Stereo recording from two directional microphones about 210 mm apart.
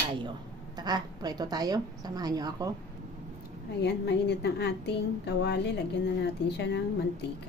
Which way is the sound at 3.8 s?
55° left (ahead or behind).